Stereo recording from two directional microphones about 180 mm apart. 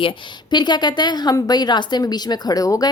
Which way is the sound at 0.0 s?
25° left (ahead or behind).